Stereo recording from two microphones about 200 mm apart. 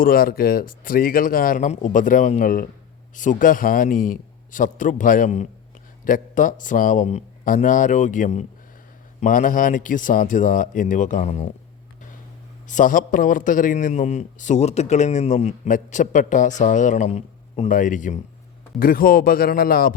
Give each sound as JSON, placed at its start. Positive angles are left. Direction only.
{"t": 0.0, "sound": "a man's voice", "side_deg": 45}
{"t": 12.6, "sound": "a man's voice", "side_deg": 40}